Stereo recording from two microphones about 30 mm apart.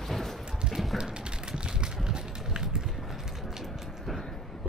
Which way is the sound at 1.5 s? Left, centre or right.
Right.